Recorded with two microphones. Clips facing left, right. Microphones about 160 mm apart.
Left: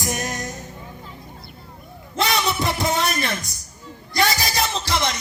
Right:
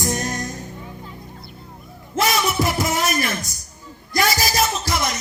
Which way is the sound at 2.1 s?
30° left (ahead or behind).